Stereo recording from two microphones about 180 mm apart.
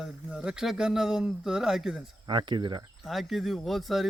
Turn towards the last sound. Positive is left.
turn(degrees=0)  # may be behind; listen again after turning